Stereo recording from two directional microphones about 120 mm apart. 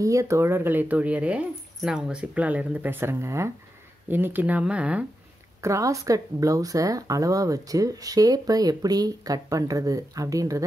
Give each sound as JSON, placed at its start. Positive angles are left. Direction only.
{"t": 0.0, "sound": "speech", "side_deg": -25}
{"t": 5.6, "sound": "speech", "side_deg": -25}